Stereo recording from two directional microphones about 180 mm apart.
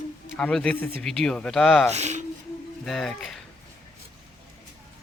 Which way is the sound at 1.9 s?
40° right (ahead or behind).